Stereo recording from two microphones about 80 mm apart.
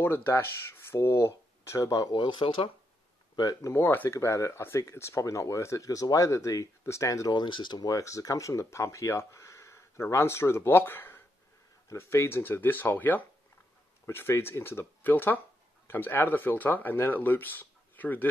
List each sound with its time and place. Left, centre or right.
0.0 s speech: left
1.8 s speech: left
2.1 s speech: left
3.6 s speech: left
4.2 s speech: left
7.3 s speech: left
7.8 s speech: left